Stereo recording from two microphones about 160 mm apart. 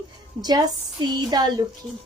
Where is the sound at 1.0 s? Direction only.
25° right (ahead or behind).